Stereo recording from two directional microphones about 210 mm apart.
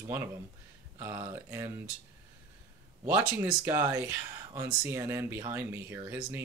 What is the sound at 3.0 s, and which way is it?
Speech, 10° right (ahead or behind).